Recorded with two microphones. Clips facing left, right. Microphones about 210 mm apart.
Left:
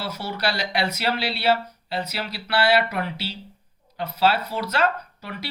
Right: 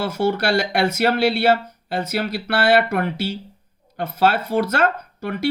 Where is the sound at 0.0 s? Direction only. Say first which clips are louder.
Right 8 dB; 50° right (ahead or behind).